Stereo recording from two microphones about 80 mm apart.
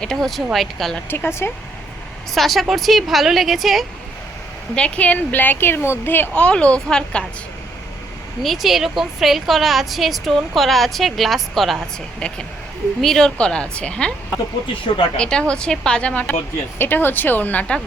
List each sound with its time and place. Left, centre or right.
0.0 s a woman's voice: centre
1.1 s a woman's voice: left
2.3 s a woman's voice: centre
4.7 s a woman's voice: centre
6.3 s a woman's voice: centre
8.4 s a woman's voice: centre
12.2 s a woman's voice: centre
15.2 s a woman's voice: centre
16.7 s a woman's voice: left